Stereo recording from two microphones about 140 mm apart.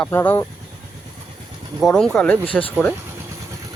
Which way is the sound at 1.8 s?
5° left (ahead or behind).